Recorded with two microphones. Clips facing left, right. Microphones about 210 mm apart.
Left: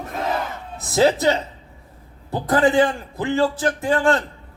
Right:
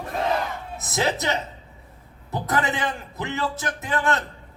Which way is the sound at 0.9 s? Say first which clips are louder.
Left 8 dB; 30° left (ahead or behind).